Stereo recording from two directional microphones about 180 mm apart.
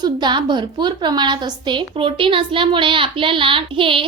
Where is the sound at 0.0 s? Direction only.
25° right (ahead or behind).